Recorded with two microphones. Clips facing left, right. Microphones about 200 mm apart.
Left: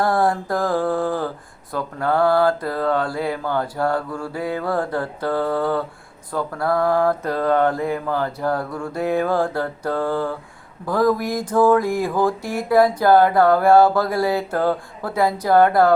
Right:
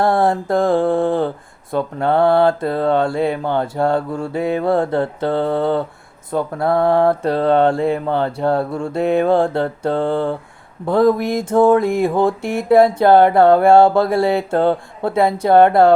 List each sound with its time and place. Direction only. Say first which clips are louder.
0.0 s mantra: right 3 dB; 25° right (ahead or behind)